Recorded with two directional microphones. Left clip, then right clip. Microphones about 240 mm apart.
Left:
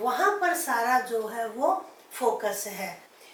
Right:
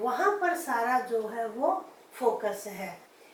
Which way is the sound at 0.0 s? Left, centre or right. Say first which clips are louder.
Left 2 dB; centre.